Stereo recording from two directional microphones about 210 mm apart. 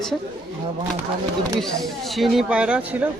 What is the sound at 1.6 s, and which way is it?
Speech, centre (ahead or behind).